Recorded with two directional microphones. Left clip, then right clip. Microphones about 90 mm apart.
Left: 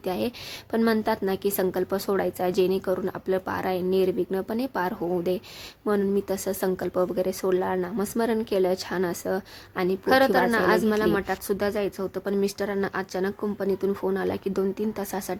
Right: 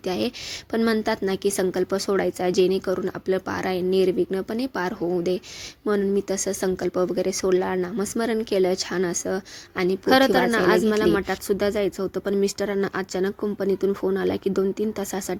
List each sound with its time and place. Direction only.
0.0 s speech: 20° right (ahead or behind)
10.1 s speech: 30° right (ahead or behind)